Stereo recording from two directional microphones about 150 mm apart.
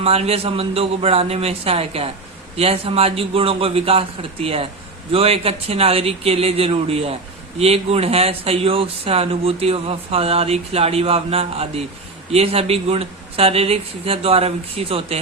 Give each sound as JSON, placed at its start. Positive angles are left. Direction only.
{"t": 0.0, "sound": "speech", "side_deg": -40}